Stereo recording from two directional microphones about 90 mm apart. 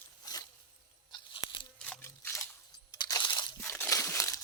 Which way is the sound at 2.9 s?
45° left (ahead or behind).